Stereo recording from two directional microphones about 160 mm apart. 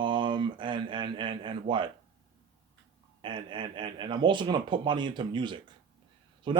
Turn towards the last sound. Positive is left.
turn(degrees=-30)  # may be behind; listen again after turning